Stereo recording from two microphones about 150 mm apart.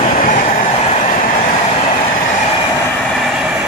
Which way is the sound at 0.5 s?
50° left (ahead or behind).